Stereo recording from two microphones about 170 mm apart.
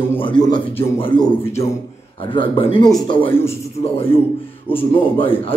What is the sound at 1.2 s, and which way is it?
Speech, 15° left (ahead or behind).